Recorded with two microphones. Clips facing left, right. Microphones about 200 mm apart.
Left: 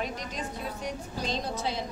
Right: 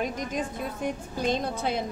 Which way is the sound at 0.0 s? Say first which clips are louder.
Right 5 dB; 50° right (ahead or behind).